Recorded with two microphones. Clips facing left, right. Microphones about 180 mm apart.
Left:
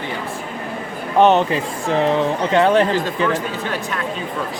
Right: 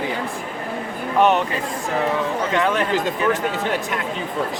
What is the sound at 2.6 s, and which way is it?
Speech, 35° left (ahead or behind).